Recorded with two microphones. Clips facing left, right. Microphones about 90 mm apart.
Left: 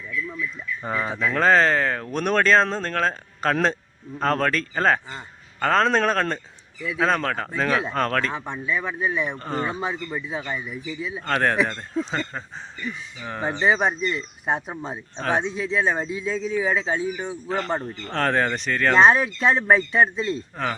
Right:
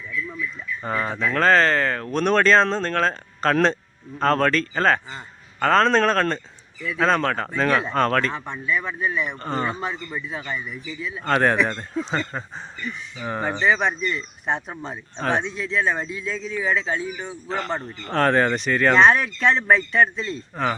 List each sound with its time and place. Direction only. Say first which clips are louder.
0.8 s a man's voice: right 1 dB; 5° left (ahead or behind)
8.3 s speech: right 1 dB; 15° left (ahead or behind)
9.4 s a man's voice: right 1 dB; centre (ahead or behind)
9.6 s speech: even; 10° left (ahead or behind)
11.3 s a man's voice: right 2 dB; 5° right (ahead or behind)
13.1 s speech: right 4 dB; 15° right (ahead or behind)
13.6 s speech: left 1 dB; 15° left (ahead or behind)
15.4 s speech: left 1 dB; 20° left (ahead or behind)
16.3 s speech: left 6 dB; 35° left (ahead or behind)
16.6 s speech: right 1 dB; 20° left (ahead or behind)
17.7 s speech: left 2 dB; 5° left (ahead or behind)
18.0 s a man's voice: right 5 dB; 5° right (ahead or behind)
19.2 s speech: even; 15° left (ahead or behind)
20.6 s a man's voice: right 6 dB; centre (ahead or behind)